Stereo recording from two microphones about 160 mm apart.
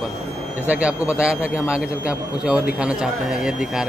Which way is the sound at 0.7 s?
5° right (ahead or behind).